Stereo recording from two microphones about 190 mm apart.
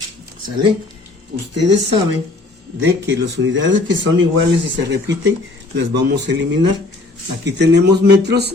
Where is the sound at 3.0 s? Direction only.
80° right.